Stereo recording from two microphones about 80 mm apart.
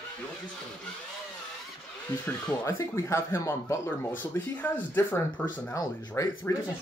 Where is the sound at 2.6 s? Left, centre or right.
Left.